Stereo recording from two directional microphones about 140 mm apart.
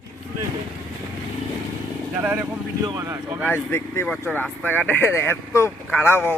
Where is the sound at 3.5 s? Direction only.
15° left (ahead or behind).